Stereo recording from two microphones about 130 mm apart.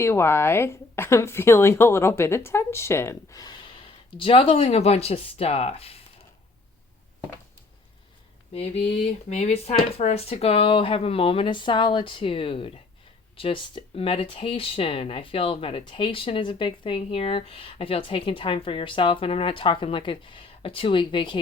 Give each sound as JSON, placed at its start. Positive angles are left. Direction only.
{"t": 0.0, "sound": "a woman's voice", "side_deg": 20}
{"t": 8.5, "sound": "speech", "side_deg": 50}